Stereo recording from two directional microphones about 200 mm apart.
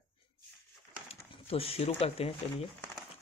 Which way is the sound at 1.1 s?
30° left (ahead or behind).